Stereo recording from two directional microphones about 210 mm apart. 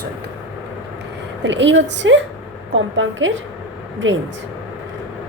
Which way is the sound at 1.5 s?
60° right (ahead or behind).